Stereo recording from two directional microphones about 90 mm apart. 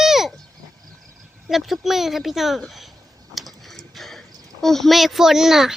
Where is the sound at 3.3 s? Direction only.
Centre (ahead or behind).